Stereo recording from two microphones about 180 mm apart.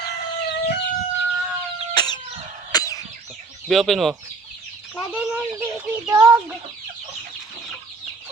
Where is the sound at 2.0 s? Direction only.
25° left (ahead or behind).